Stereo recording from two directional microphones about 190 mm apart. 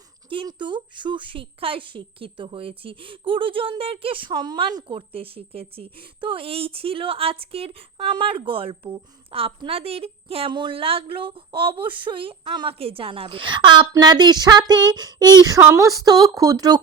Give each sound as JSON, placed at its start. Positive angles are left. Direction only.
{"t": 0.3, "sound": "a woman's voice", "side_deg": -25}